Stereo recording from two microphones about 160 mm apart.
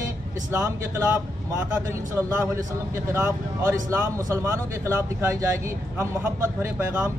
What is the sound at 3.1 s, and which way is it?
Speech, 15° right (ahead or behind).